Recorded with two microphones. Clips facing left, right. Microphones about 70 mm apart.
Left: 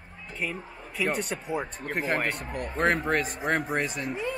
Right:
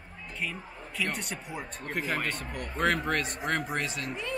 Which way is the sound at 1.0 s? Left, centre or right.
Centre.